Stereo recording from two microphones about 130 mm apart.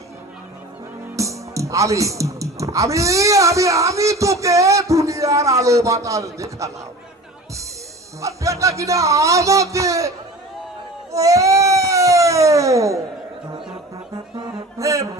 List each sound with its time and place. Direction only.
1.1 s speech: 25° right (ahead or behind)
8.2 s speech: 25° right (ahead or behind)
11.1 s speech: 25° right (ahead or behind)
14.3 s music: 30° right (ahead or behind)